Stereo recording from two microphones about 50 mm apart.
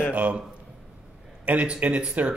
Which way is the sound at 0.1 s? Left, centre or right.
Right.